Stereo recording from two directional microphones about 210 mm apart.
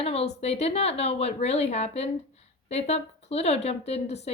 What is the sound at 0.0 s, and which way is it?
A woman's voice, 30° left (ahead or behind).